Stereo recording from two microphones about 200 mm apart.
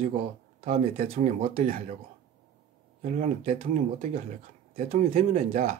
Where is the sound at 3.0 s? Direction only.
35° right (ahead or behind).